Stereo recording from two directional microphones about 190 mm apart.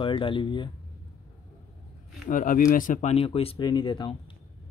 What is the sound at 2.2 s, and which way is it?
Speech, 45° left (ahead or behind).